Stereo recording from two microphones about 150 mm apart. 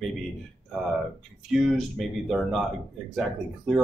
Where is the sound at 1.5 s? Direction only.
Centre (ahead or behind).